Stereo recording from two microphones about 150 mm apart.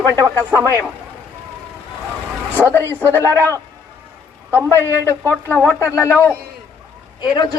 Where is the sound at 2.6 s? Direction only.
15° left (ahead or behind).